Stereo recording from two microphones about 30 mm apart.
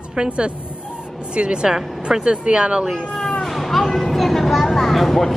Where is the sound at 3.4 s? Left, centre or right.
Centre.